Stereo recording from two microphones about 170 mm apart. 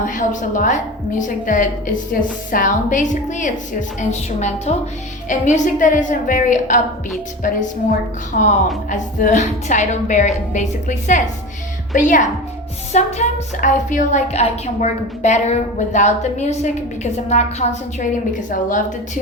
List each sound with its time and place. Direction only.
0.0 s a woman's voice: 50° left (ahead or behind)